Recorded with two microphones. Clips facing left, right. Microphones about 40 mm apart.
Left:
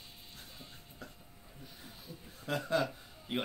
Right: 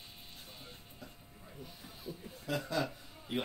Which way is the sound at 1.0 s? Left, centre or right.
Left.